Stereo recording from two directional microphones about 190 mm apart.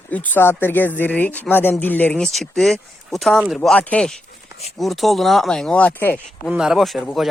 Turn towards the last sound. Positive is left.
turn(degrees=0)  # may be behind; listen again after turning